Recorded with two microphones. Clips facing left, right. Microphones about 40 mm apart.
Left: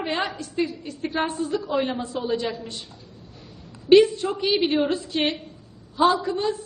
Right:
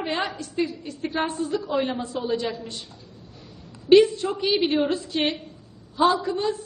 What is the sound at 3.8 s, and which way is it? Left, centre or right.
A woman's voice, centre.